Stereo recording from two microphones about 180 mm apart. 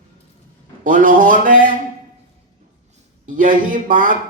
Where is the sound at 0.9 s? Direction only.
50° right (ahead or behind).